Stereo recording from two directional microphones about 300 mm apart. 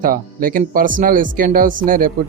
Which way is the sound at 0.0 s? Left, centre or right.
Right.